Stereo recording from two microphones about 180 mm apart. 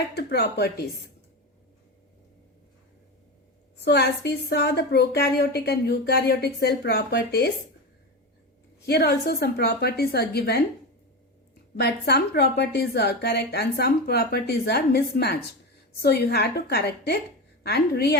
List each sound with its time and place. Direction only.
0.1 s a woman's voice: 65° left (ahead or behind)
3.8 s a woman's voice: 70° left (ahead or behind)
8.9 s a woman's voice: 60° left (ahead or behind)
11.8 s a woman's voice: 65° left (ahead or behind)